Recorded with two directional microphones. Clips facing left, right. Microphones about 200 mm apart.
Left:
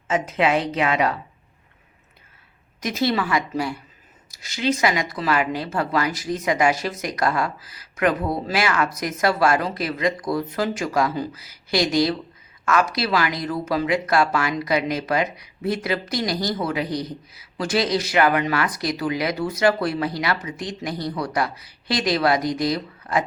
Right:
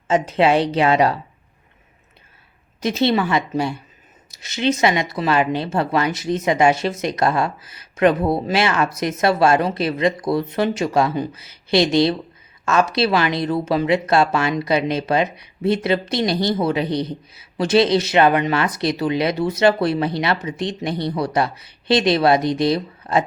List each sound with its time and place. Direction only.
0.1 s a woman's voice: 30° right (ahead or behind)
2.8 s speech: 25° right (ahead or behind)